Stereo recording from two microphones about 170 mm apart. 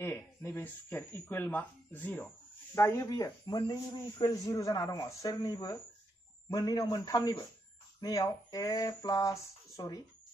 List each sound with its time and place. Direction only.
0.0 s a man's voice: 15° left (ahead or behind)